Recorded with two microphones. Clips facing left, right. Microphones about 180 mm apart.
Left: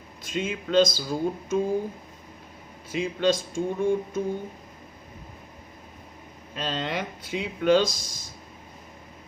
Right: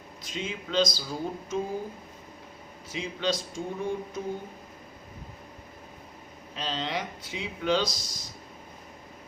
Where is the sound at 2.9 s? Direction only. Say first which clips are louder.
Left 6 dB; 55° left (ahead or behind).